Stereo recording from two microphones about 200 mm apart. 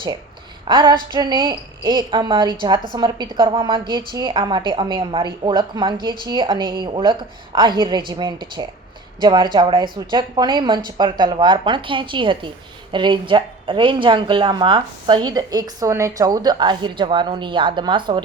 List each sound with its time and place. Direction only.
0.7 s a woman's voice: 20° right (ahead or behind)